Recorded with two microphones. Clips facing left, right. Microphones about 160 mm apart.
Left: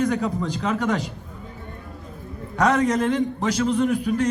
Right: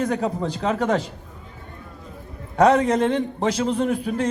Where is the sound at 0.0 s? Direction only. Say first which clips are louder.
Even; 30° right (ahead or behind).